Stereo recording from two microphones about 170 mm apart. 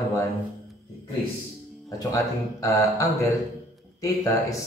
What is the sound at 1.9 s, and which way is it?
A man's voice, 20° left (ahead or behind).